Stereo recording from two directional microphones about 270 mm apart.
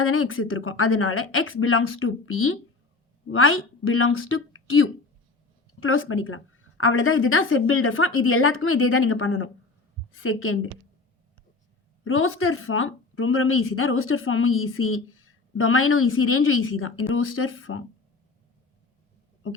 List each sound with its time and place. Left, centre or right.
0.0 s a woman's voice: left
12.0 s a woman's voice: left